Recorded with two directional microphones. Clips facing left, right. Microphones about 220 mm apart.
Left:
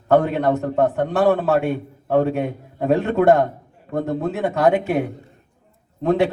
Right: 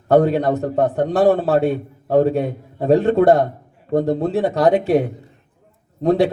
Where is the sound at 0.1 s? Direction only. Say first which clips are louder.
Right 2 dB; 35° right (ahead or behind).